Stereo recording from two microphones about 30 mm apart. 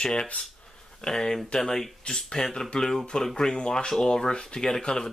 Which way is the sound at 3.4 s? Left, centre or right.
Left.